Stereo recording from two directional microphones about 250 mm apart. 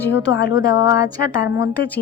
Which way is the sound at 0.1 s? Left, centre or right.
Left.